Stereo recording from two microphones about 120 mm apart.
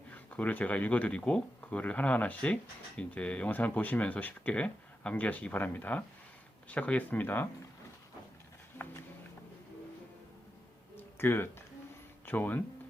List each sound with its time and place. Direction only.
0.1 s speech: 10° left (ahead or behind)
8.8 s music: 15° left (ahead or behind)
10.9 s a sound: 20° left (ahead or behind)
12.2 s speech: 15° left (ahead or behind)